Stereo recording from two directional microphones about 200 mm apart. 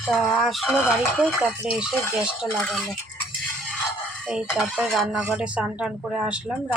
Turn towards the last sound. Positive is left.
turn(degrees=-5)  # may be behind; listen again after turning